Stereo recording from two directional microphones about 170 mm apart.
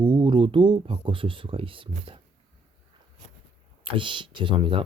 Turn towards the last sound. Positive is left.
turn(degrees=-30)  # may be behind; listen again after turning